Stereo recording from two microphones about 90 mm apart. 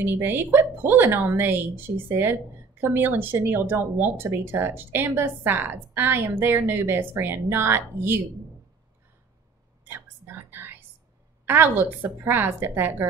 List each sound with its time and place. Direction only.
0.0 s a woman's voice: 25° right (ahead or behind)
9.8 s whispering: 25° right (ahead or behind)
11.4 s a woman's voice: 25° right (ahead or behind)